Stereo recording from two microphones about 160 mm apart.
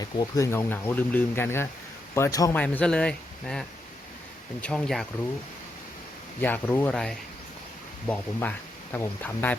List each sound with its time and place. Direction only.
0.0 s speech: 20° left (ahead or behind)
2.6 s speech: 5° left (ahead or behind)
6.4 s speech: 10° left (ahead or behind)